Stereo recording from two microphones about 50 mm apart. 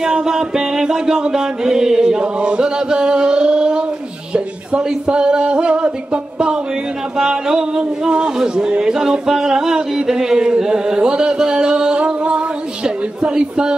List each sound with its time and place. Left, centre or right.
0.0 s speech: centre
4.3 s a sound: centre
7.2 s speech: centre